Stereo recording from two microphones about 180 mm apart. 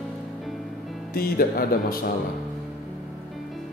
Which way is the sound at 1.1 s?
55° left (ahead or behind).